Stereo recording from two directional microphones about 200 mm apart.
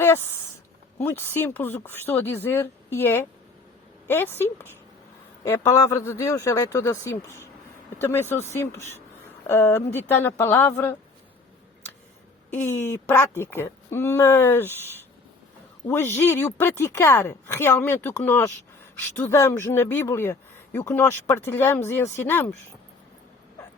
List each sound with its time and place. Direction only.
0.0 s a sound: 10° left (ahead or behind)
0.9 s speech: 10° left (ahead or behind)
12.5 s speech: 10° left (ahead or behind)